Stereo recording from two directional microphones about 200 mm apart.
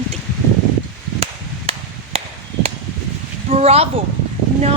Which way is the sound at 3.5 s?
30° right (ahead or behind).